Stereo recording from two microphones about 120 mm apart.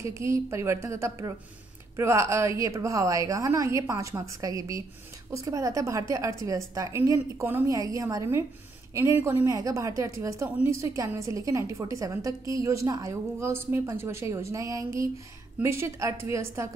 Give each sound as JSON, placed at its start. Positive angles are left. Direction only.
{"t": 0.0, "sound": "a woman's voice", "side_deg": -25}